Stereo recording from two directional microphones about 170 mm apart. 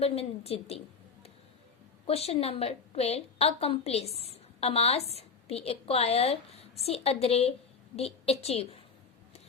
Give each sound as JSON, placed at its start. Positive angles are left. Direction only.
{"t": 0.0, "sound": "a woman's voice", "side_deg": 35}
{"t": 2.0, "sound": "a woman's voice", "side_deg": 35}